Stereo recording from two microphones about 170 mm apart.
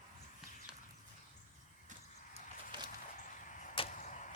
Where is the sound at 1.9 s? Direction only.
45° right (ahead or behind).